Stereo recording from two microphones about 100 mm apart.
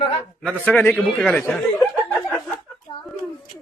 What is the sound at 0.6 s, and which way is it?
A man's voice, 15° left (ahead or behind).